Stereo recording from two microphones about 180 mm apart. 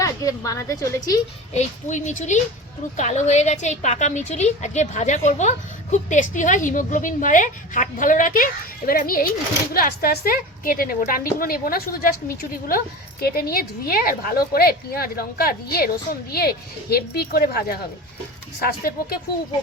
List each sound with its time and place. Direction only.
0.0 s a woman's voice: 20° left (ahead or behind)
1.5 s a woman's voice: 40° left (ahead or behind); by 17.7 s 60° left (ahead or behind)
18.8 s a woman's voice: 55° left (ahead or behind)